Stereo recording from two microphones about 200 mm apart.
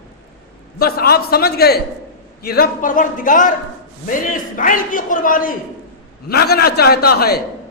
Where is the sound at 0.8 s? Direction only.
50° left (ahead or behind).